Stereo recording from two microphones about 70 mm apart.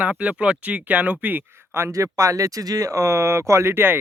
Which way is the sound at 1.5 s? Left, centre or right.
Right.